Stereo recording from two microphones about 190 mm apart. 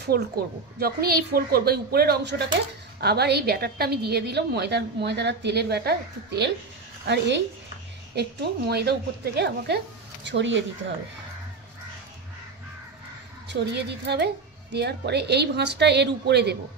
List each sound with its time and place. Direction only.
0.1 s a woman's voice: 55° right (ahead or behind)
10.2 s speech: 70° right (ahead or behind)
13.5 s a woman's voice: 65° right (ahead or behind)